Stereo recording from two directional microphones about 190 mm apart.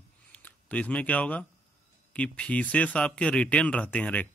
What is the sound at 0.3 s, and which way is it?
Speech, 5° left (ahead or behind).